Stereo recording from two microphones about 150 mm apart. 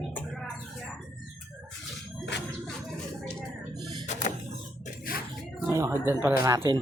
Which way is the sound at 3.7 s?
30° right (ahead or behind).